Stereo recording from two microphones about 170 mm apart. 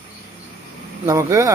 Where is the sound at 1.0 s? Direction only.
20° right (ahead or behind).